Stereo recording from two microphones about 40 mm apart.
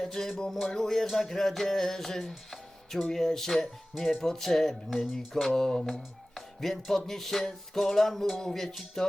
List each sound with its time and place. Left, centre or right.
0.0 s music: centre
2.5 s speech: centre
3.9 s speech: centre
4.2 s music: centre